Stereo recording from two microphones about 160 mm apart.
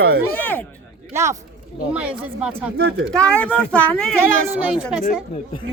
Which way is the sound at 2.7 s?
85° right.